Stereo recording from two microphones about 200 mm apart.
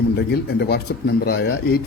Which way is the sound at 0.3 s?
55° left (ahead or behind).